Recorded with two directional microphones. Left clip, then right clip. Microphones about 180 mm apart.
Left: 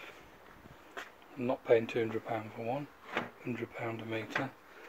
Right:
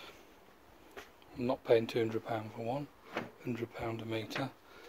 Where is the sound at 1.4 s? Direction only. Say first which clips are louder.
Left 1 dB; 20° right (ahead or behind).